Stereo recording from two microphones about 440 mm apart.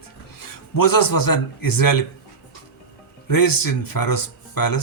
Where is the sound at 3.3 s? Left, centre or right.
Left.